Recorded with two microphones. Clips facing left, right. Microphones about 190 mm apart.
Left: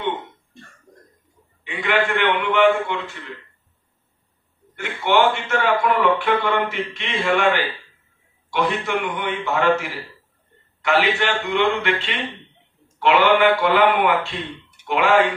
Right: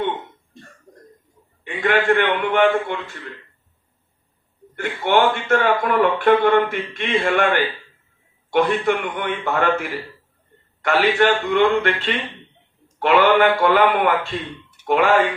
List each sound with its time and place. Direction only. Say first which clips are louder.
1.6 s a man's voice: right 3 dB; 45° right (ahead or behind)
4.7 s a man's voice: right 1 dB; 50° right (ahead or behind)